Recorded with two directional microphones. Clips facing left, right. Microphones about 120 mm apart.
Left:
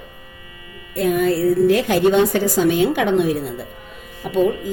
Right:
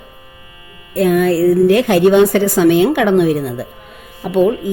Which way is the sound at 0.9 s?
80° right.